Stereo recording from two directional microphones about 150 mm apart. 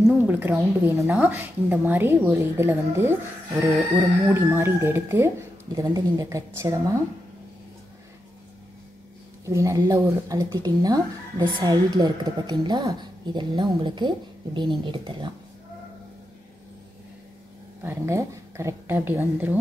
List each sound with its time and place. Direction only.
0.0 s a woman's voice: 10° right (ahead or behind)
9.5 s speech: 20° right (ahead or behind)
17.8 s a woman's voice: 20° right (ahead or behind)